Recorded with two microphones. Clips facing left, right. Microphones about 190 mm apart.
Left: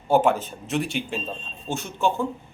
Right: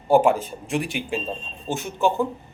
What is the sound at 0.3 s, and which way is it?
A man's voice, 15° right (ahead or behind).